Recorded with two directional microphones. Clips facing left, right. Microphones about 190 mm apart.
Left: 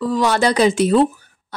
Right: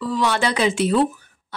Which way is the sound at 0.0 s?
45° left (ahead or behind).